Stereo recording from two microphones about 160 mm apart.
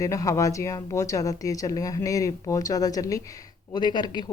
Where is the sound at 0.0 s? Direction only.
20° left (ahead or behind).